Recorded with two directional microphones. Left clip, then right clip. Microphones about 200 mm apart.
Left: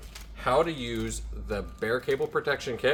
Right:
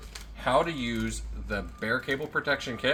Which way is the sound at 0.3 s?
25° left (ahead or behind).